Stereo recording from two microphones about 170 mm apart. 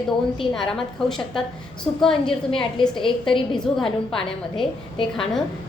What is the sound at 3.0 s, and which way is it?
Speech, 30° left (ahead or behind).